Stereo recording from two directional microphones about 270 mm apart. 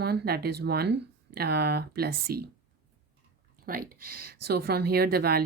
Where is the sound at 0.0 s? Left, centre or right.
Right.